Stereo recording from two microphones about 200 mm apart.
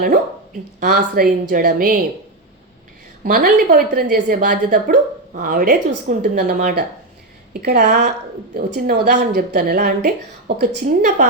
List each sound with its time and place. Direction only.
0.8 s a woman's voice: 50° right (ahead or behind)
3.2 s a woman's voice: 45° right (ahead or behind)
7.5 s a woman's voice: 55° right (ahead or behind)